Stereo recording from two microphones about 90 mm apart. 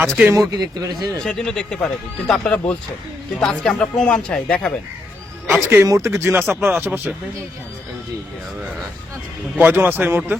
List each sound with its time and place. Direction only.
0.0 s speech: 25° right (ahead or behind)
0.5 s speech: 45° right (ahead or behind)
1.2 s speech: 5° left (ahead or behind)
5.6 s speech: 25° right (ahead or behind)
9.6 s speech: 20° right (ahead or behind)